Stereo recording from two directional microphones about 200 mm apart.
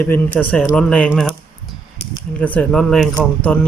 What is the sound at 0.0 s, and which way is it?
Speech, 10° left (ahead or behind).